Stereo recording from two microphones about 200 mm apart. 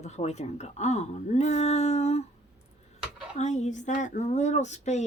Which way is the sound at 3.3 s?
35° left (ahead or behind).